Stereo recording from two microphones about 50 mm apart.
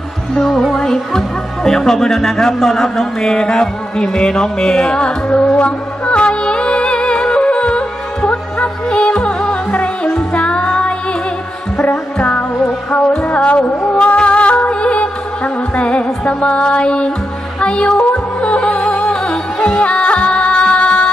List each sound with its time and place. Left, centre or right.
0.5 s music: centre
0.7 s speech: centre
5.6 s music: left
19.6 s music: left
19.9 s music: left